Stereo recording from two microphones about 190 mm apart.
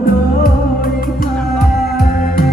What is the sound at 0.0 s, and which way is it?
Music, 50° left (ahead or behind).